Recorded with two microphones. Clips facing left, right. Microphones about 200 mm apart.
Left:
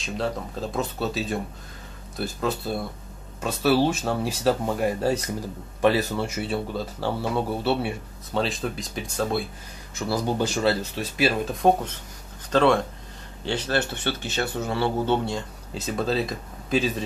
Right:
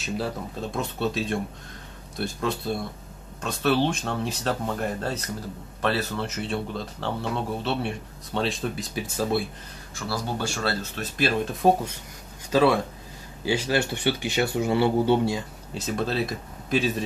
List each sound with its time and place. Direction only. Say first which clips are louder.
0.0 s speech: left 1 dB; centre (ahead or behind)
9.9 s speech: left 5 dB; 20° left (ahead or behind); by 17.0 s centre (ahead or behind)